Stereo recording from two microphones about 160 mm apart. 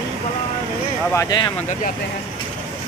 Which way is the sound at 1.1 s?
20° left (ahead or behind).